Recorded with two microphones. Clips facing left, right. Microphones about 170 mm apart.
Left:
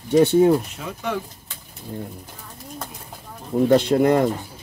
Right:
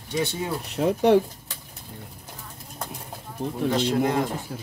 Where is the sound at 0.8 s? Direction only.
45° right (ahead or behind).